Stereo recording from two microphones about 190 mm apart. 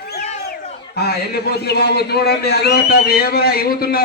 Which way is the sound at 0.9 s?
55° left (ahead or behind).